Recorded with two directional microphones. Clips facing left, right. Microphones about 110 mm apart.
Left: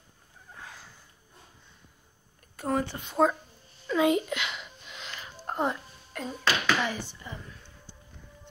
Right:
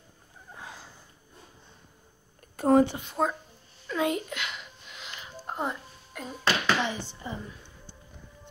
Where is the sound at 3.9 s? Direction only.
5° left (ahead or behind).